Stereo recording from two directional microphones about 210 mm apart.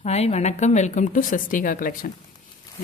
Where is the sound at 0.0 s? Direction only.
30° left (ahead or behind).